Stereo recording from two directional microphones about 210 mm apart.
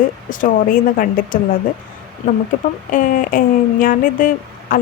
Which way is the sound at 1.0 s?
40° left (ahead or behind).